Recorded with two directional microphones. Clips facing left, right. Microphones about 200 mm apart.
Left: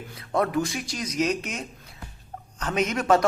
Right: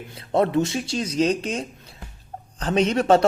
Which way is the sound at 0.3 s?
25° right (ahead or behind).